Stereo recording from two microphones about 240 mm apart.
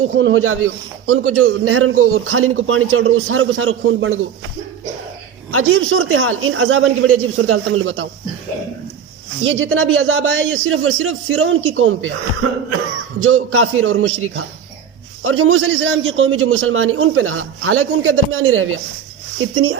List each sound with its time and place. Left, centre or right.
0.0 s a man's voice: right
5.5 s a man's voice: right
9.4 s a man's voice: right
13.2 s a man's voice: right